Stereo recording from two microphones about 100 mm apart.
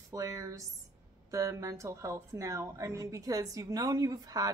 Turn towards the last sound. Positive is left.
turn(degrees=-40)  # may be behind; listen again after turning